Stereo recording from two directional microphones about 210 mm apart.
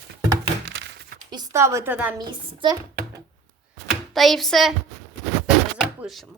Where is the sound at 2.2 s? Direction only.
20° right (ahead or behind).